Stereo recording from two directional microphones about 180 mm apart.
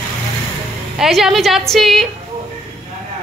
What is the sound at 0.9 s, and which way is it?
Speech, centre (ahead or behind).